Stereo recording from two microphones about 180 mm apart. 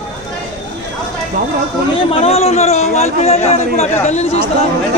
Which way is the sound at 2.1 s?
35° left (ahead or behind).